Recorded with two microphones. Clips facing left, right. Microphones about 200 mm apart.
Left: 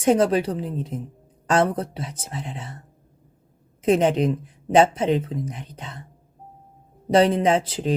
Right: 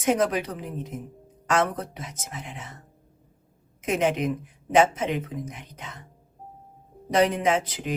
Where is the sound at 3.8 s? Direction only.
35° left (ahead or behind).